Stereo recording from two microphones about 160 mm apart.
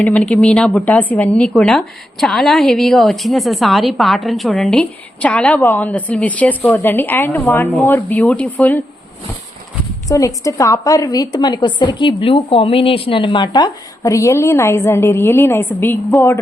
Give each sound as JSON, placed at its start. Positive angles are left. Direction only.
{"t": 0.0, "sound": "speech", "side_deg": 10}
{"t": 10.1, "sound": "speech", "side_deg": 20}